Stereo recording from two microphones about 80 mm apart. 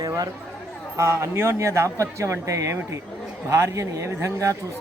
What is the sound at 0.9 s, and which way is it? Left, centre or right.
A man's voice, right.